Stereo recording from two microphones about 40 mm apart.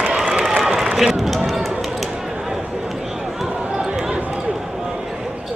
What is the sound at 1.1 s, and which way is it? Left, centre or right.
Speech, centre.